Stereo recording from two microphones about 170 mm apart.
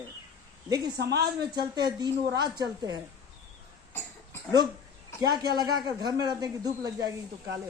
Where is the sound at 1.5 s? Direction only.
25° right (ahead or behind).